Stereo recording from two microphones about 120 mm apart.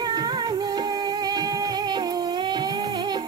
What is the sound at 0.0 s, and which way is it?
Music, 35° right (ahead or behind).